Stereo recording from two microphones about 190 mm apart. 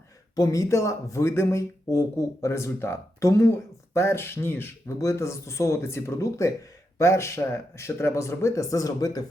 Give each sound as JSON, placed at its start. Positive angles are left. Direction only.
{"t": 0.3, "sound": "speech", "side_deg": 20}